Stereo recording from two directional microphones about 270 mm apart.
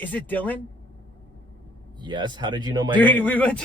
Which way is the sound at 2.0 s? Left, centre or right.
Centre.